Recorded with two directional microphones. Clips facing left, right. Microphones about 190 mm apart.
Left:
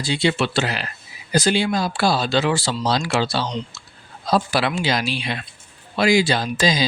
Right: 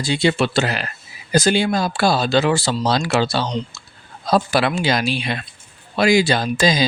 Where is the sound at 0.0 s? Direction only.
45° right (ahead or behind).